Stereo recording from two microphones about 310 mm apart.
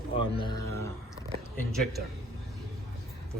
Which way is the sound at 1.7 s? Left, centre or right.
Centre.